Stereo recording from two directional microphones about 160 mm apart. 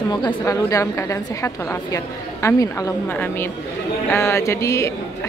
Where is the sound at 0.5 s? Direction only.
20° left (ahead or behind).